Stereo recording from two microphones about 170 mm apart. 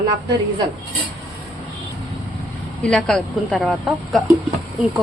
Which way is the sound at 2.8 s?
5° left (ahead or behind).